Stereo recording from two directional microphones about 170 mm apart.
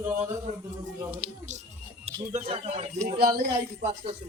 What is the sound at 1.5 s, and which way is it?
Music, 45° right (ahead or behind).